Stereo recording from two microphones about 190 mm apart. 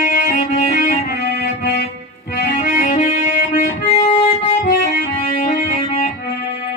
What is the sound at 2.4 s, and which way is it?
Music, 50° left (ahead or behind).